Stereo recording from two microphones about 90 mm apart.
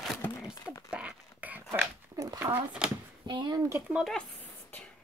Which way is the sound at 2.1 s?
40° right (ahead or behind).